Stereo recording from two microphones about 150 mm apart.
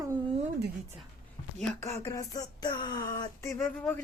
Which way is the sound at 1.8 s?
20° left (ahead or behind).